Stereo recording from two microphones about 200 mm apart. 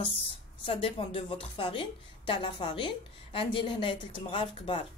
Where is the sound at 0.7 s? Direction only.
25° left (ahead or behind).